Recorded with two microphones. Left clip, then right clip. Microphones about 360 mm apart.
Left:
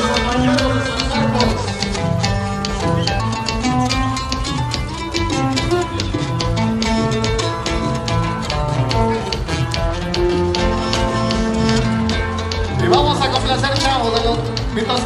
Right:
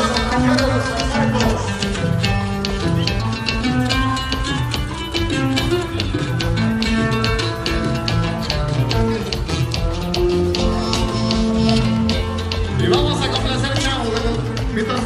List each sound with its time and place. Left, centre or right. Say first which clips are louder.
0.0 s music: left 1 dB; centre
3.6 s music: left 2 dB; centre
5.3 s music: left 1 dB; centre
6.8 s music: left 1 dB; centre
10.1 s music: even; centre